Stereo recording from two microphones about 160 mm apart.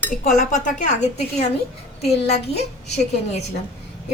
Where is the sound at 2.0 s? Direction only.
40° left (ahead or behind).